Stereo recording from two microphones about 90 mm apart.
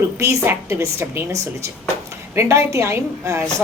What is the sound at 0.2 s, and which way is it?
A woman's voice, 30° right (ahead or behind).